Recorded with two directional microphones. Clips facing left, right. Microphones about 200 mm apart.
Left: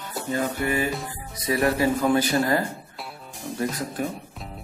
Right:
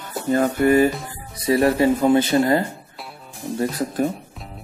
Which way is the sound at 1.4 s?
30° right (ahead or behind).